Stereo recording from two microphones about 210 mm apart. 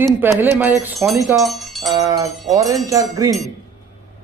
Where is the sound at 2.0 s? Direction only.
15° right (ahead or behind).